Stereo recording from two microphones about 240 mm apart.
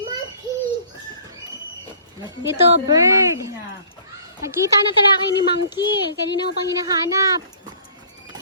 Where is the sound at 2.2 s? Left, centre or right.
Centre.